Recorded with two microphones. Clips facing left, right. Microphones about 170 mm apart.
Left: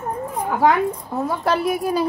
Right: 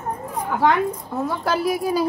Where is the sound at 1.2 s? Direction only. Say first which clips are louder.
Left 1 dB; centre (ahead or behind).